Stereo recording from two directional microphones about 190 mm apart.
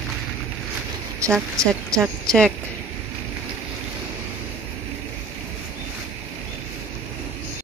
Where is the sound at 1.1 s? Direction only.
15° right (ahead or behind).